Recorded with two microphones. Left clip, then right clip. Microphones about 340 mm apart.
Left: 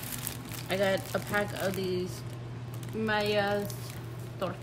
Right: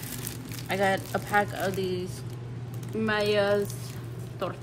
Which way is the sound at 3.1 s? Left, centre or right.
Right.